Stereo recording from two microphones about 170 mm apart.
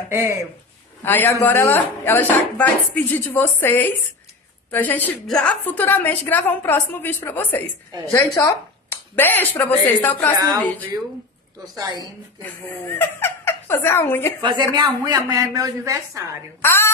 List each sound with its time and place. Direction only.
0.1 s speech: 15° right (ahead or behind)
1.0 s a woman's voice: 10° left (ahead or behind)
10.3 s speech: 20° right (ahead or behind)
11.6 s speech: 25° right (ahead or behind)
12.9 s speech: 15° left (ahead or behind)
14.4 s speech: 25° right (ahead or behind)
16.6 s a woman's voice: 15° left (ahead or behind)